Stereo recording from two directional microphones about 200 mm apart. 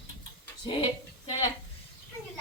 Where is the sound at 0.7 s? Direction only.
20° left (ahead or behind).